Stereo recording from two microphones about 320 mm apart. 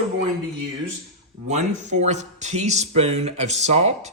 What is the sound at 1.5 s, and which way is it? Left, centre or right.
Speech, right.